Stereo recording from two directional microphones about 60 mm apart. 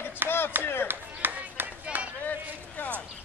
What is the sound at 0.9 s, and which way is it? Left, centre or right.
Chop, right.